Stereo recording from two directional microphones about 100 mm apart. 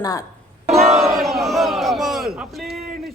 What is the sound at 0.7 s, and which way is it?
Battle cry, centre (ahead or behind).